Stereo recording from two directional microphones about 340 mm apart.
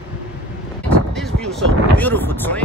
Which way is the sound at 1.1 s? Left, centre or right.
Centre.